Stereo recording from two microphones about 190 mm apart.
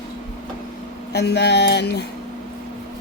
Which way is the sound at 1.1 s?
60° left (ahead or behind).